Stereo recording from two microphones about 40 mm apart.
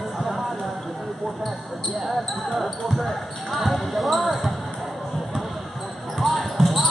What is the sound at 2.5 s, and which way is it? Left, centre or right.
Basketball bounce, centre.